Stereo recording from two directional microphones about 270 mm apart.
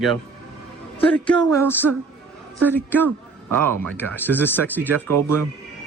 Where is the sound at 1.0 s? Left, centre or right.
Centre.